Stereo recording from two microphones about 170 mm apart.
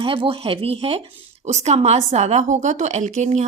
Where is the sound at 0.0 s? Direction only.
30° right (ahead or behind).